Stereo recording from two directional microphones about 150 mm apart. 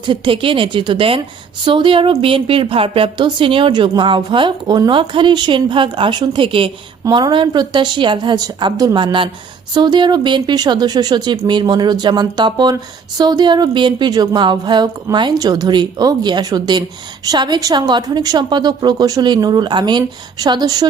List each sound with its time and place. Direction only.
0.0 s a woman's voice: 35° right (ahead or behind)